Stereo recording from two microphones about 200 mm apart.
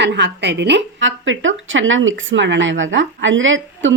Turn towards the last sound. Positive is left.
turn(degrees=-70)  # may be behind; listen again after turning